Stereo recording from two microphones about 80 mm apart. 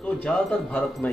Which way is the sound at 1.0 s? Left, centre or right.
Left.